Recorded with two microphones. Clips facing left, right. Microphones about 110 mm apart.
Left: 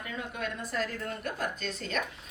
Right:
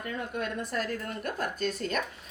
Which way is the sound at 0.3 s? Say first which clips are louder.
Right 1 dB; 45° right (ahead or behind).